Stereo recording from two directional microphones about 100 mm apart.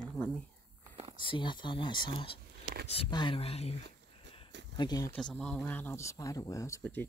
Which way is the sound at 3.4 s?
90° left.